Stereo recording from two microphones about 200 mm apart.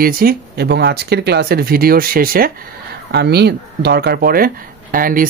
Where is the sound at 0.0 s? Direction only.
45° right (ahead or behind).